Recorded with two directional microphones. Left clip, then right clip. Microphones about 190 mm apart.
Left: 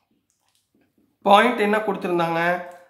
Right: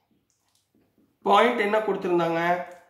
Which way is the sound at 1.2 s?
35° left (ahead or behind).